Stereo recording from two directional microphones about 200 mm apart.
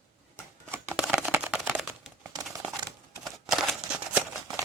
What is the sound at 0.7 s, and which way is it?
Typewriter, 10° right (ahead or behind).